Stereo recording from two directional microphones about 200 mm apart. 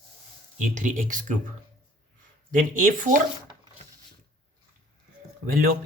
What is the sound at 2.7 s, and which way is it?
Speech, 40° right (ahead or behind).